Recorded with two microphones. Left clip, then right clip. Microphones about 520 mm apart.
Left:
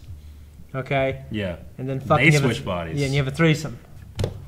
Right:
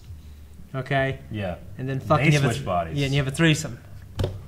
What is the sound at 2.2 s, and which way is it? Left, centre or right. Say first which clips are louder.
Speech: left 4 dB; right.